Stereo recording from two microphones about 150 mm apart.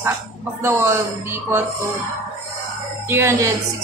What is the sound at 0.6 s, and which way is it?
A woman's voice, 15° right (ahead or behind).